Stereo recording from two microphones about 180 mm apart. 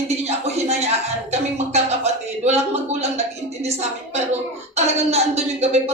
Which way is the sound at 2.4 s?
40° right (ahead or behind).